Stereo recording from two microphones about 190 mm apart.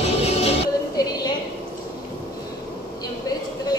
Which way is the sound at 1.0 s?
20° left (ahead or behind).